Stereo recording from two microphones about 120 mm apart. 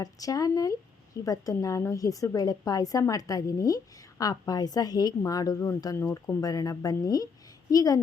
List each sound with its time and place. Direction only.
0.0 s a woman's voice: 30° left (ahead or behind)